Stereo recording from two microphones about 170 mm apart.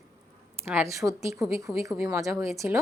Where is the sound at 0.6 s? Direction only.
15° right (ahead or behind).